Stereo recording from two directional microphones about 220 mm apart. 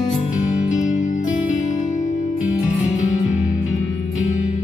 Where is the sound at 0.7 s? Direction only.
35° left (ahead or behind).